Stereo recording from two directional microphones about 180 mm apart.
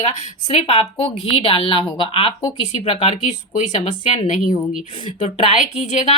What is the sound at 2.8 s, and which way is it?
Speech, 30° left (ahead or behind).